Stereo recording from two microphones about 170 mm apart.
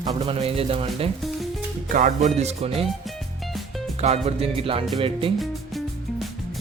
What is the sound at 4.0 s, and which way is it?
A man's voice, 40° right (ahead or behind).